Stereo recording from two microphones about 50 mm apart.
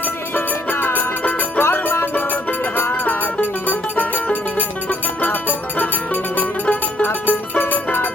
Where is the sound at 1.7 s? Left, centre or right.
Left.